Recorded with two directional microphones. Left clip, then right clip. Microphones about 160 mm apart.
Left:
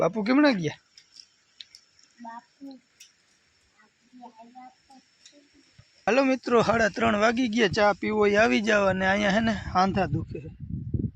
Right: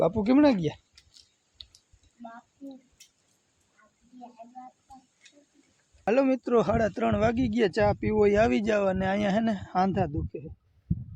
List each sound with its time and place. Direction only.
0.0 s speech: 20° right (ahead or behind)
6.1 s speech: 5° right (ahead or behind)